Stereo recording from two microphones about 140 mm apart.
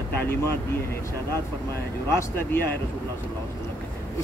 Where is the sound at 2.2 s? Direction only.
15° left (ahead or behind).